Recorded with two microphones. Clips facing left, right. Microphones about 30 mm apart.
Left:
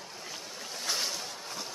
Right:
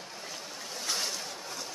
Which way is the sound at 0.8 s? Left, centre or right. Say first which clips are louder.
Left 1 dB; centre.